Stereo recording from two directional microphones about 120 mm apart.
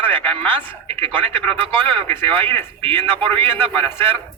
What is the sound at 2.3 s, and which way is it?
Speech, 45° right (ahead or behind).